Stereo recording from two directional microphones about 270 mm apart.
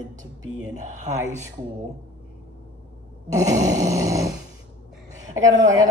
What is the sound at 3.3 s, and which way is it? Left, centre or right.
Dog, centre.